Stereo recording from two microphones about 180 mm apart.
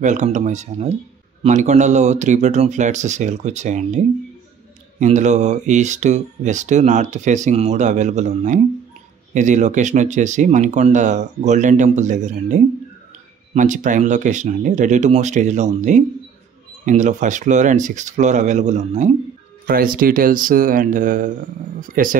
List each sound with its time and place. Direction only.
0.0 s speech: 40° right (ahead or behind)
19.6 s speech: 50° right (ahead or behind)